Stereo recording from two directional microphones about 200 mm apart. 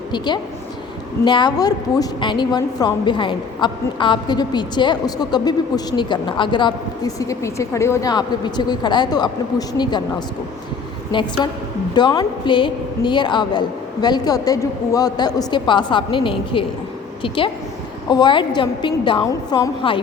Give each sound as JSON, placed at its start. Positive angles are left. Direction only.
{"t": 1.2, "sound": "a woman's voice", "side_deg": 20}
{"t": 11.1, "sound": "a woman's voice", "side_deg": 25}